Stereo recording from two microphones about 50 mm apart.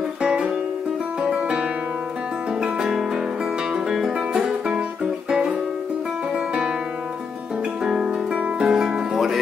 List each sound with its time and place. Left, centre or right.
0.2 s music: centre
1.2 s guitar: right
2.6 s music: centre
4.4 s music: centre
7.8 s music: centre
8.3 s music: right